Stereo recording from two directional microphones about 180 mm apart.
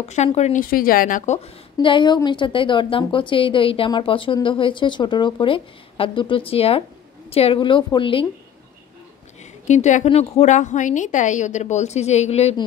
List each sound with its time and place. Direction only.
0.1 s a woman's voice: 40° left (ahead or behind)
9.4 s a woman's voice: 40° left (ahead or behind)